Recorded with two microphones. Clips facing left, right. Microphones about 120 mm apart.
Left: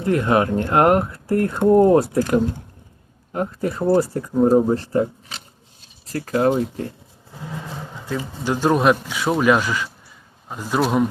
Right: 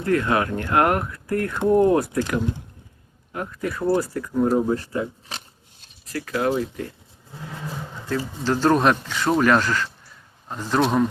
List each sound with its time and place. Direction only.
0.0 s speech: 20° left (ahead or behind); by 5.0 s 40° left (ahead or behind)
6.1 s speech: 35° left (ahead or behind)
8.4 s speech: 10° left (ahead or behind)